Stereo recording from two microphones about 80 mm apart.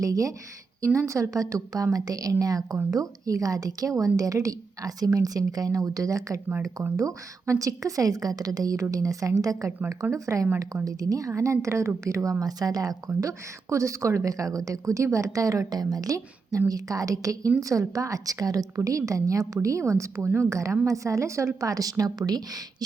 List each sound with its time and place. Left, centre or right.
0.0 s a woman's voice: right
13.1 s a woman's voice: right